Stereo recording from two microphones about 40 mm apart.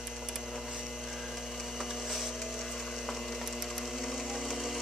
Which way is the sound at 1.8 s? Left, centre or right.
Centre.